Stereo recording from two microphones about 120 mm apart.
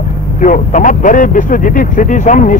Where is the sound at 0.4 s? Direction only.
90° left.